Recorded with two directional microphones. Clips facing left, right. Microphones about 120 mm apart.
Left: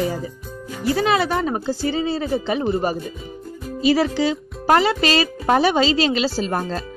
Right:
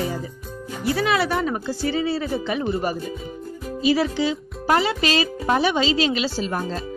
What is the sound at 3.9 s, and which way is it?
Speech, 40° left (ahead or behind).